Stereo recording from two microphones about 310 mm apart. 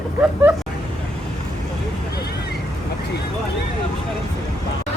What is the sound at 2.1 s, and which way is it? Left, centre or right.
Vehicle, left.